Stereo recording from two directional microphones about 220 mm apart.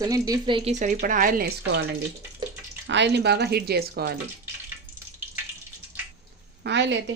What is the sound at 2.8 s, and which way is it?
Speech, 55° right (ahead or behind).